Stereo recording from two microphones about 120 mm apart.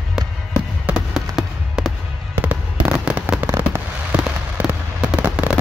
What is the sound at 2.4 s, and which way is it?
Fireworks, 10° right (ahead or behind).